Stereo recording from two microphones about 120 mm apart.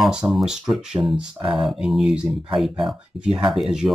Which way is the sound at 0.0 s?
5° right (ahead or behind).